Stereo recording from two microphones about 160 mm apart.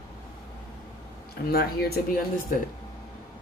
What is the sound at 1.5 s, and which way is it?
Speech, 75° left (ahead or behind).